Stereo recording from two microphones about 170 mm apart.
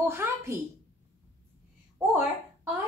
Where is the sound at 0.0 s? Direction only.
15° right (ahead or behind).